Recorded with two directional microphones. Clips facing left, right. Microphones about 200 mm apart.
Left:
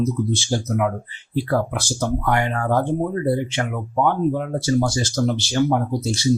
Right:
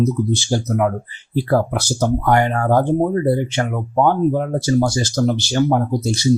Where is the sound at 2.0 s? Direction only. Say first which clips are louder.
Right 5 dB; 40° right (ahead or behind).